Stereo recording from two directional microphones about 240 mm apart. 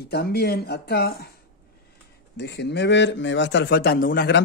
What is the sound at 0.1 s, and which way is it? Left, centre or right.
Speech, left.